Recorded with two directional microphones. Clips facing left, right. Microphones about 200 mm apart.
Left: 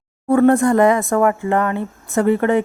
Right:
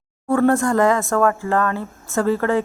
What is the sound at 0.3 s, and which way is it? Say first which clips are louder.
A woman's voice: left 4 dB; 15° left (ahead or behind).